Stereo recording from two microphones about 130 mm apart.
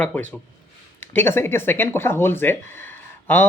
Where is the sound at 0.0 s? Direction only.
15° left (ahead or behind).